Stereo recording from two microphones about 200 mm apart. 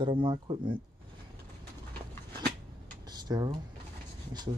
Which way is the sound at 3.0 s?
20° right (ahead or behind).